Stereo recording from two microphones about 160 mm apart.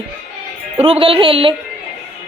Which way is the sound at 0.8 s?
35° right (ahead or behind).